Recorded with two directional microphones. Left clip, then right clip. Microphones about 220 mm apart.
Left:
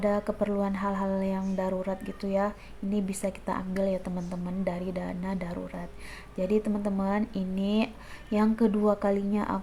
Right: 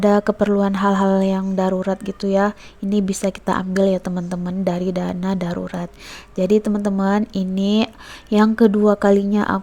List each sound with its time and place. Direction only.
0.0 s speech: 40° right (ahead or behind)